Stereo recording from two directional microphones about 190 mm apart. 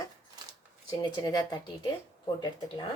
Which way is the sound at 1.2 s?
20° left (ahead or behind).